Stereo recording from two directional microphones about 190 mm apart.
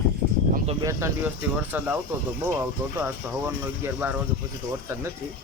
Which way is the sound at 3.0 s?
10° right (ahead or behind).